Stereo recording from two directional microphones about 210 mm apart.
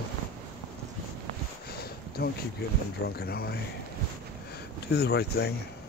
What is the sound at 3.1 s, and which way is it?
Speech, 50° left (ahead or behind).